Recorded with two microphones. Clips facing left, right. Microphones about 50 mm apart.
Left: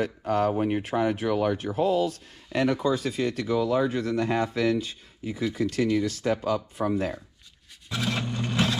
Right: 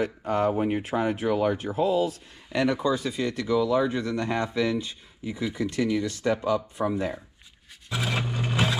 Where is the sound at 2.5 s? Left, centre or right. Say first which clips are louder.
Even; right.